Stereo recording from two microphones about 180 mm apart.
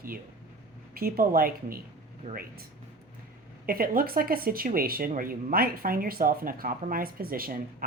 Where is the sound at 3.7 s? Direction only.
55° right (ahead or behind).